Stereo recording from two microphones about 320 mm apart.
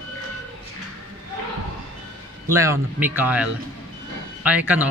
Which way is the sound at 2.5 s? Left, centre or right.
Centre.